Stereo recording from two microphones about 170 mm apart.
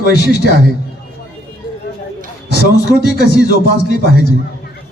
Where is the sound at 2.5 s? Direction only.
75° left (ahead or behind).